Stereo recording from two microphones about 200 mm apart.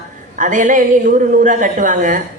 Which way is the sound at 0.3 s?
40° right (ahead or behind).